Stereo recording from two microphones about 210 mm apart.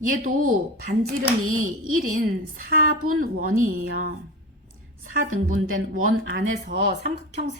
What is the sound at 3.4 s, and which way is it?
Speech, 40° right (ahead or behind).